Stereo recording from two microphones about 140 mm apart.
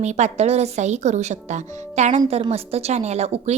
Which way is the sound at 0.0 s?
55° right (ahead or behind).